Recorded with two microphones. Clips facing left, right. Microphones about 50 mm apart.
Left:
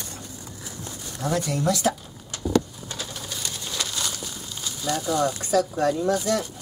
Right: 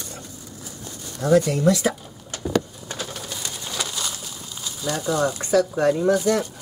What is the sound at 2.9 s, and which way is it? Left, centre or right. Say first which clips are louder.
Bird: right 3 dB; right.